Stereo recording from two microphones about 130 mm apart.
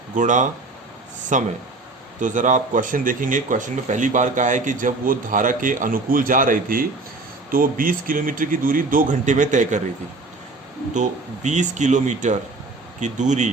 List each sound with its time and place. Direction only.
0.2 s speech: 75° right (ahead or behind)
10.9 s speech: 70° right (ahead or behind)